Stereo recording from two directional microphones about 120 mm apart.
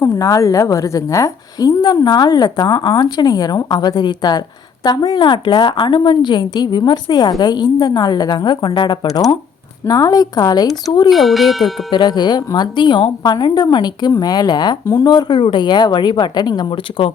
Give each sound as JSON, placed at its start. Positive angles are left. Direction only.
{"t": 0.2, "sound": "a woman's voice", "side_deg": 25}
{"t": 11.1, "sound": "speech", "side_deg": 0}
{"t": 11.9, "sound": "a woman's voice", "side_deg": 40}